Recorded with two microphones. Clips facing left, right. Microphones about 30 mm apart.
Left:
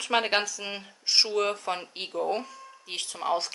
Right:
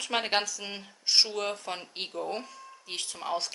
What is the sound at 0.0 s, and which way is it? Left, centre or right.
Speech, centre.